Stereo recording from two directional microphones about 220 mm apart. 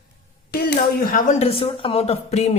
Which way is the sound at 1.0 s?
35° left (ahead or behind).